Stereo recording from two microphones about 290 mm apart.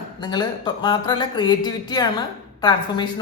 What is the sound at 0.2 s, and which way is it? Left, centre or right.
Speech, centre.